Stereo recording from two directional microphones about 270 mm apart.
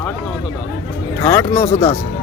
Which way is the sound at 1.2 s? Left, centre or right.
Centre.